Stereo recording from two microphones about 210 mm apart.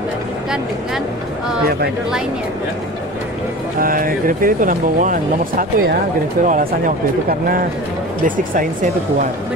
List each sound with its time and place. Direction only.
3.8 s speech: 40° right (ahead or behind)